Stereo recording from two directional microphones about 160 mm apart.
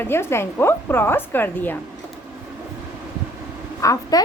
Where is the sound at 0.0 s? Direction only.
15° left (ahead or behind).